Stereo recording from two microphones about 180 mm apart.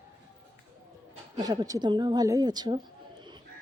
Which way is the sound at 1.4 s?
20° right (ahead or behind).